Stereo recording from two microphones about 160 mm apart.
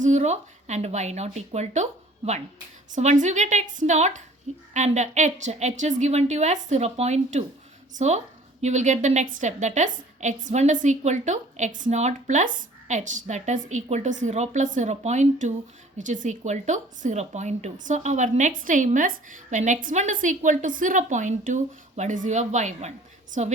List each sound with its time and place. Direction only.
0.0 s a woman's voice: 45° right (ahead or behind)